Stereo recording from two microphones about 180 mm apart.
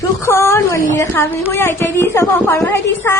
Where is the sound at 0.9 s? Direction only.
15° left (ahead or behind).